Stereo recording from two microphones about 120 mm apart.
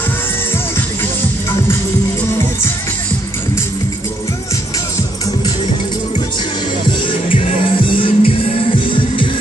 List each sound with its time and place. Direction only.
7.3 s music: 50° left (ahead or behind)